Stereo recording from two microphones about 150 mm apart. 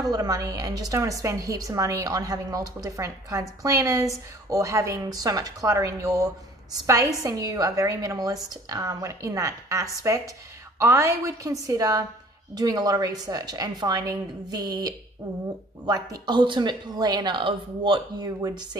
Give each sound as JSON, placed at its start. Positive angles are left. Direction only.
{"t": 0.0, "sound": "a woman's voice", "side_deg": -25}